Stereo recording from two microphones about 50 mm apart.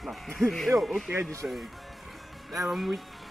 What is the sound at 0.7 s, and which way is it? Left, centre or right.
Speech, centre.